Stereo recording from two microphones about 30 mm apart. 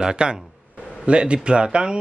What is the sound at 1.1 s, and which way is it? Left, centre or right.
Speech, right.